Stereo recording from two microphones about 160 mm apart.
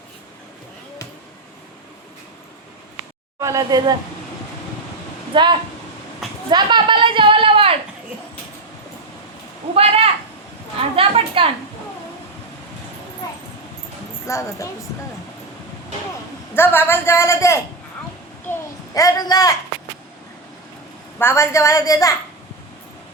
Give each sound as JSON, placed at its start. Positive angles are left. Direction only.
{"t": 3.4, "sound": "speech", "side_deg": -20}
{"t": 5.3, "sound": "speech", "side_deg": -30}
{"t": 6.5, "sound": "a sound", "side_deg": -25}
{"t": 9.7, "sound": "a woman's voice", "side_deg": -40}
{"t": 13.2, "sound": "a sound", "side_deg": 25}
{"t": 14.3, "sound": "a woman's voice", "side_deg": 20}
{"t": 16.6, "sound": "a man's voice", "side_deg": 15}
{"t": 18.9, "sound": "a woman's voice", "side_deg": 20}
{"t": 21.2, "sound": "a woman's voice", "side_deg": 15}